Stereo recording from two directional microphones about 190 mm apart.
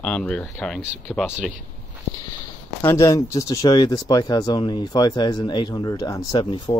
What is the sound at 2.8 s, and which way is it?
Speech, 15° left (ahead or behind).